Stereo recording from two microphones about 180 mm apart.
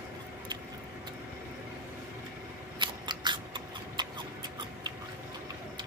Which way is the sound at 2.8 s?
25° right (ahead or behind).